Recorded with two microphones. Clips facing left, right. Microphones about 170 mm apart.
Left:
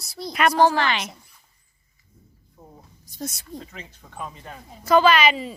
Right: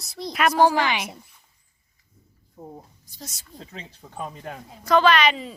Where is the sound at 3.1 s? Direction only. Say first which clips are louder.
Left 9 dB; 55° left (ahead or behind).